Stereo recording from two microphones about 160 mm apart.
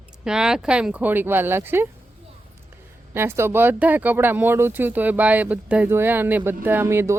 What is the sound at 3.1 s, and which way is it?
Speech, 15° right (ahead or behind).